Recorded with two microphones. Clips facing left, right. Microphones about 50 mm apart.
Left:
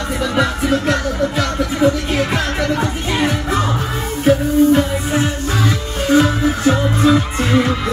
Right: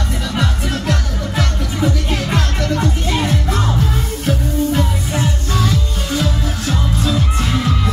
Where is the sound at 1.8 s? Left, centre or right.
Centre.